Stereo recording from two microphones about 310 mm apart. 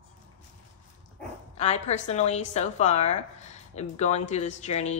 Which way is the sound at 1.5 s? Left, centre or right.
Left.